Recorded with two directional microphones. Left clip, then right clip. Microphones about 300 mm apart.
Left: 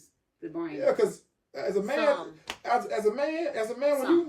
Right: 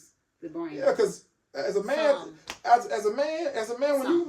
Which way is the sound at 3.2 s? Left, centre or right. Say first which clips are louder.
Right 1 dB; centre.